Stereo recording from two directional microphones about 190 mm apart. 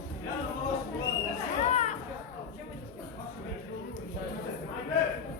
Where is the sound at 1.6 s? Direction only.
35° left (ahead or behind).